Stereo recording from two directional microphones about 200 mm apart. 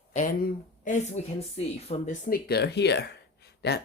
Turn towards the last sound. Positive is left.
turn(degrees=55)  # may be behind; listen again after turning